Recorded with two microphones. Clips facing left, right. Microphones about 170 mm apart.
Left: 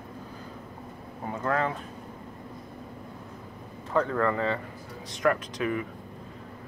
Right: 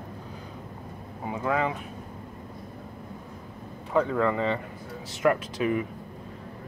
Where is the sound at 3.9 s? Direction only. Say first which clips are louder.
Right 1 dB; 10° right (ahead or behind).